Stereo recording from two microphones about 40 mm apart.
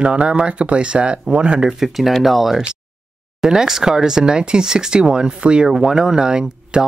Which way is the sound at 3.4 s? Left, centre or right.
Centre.